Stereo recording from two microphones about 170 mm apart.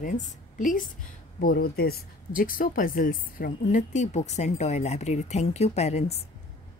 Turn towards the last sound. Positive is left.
turn(degrees=40)  # may be behind; listen again after turning